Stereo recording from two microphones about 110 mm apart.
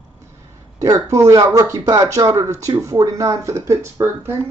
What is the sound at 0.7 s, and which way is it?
Speech, 30° right (ahead or behind).